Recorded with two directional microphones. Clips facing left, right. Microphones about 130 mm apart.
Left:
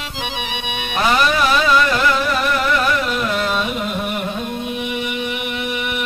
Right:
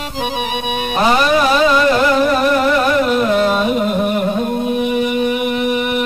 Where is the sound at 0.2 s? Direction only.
40° right (ahead or behind).